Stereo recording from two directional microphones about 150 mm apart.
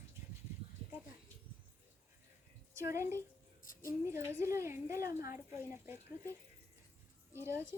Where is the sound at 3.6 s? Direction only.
70° left (ahead or behind).